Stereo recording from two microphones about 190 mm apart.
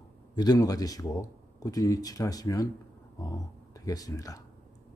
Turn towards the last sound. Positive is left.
turn(degrees=20)  # may be behind; listen again after turning